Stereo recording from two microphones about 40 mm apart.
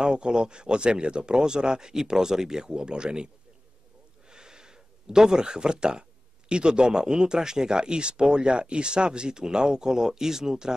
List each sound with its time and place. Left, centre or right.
0.0 s speech: right
4.3 s a sound: centre
6.5 s speech: right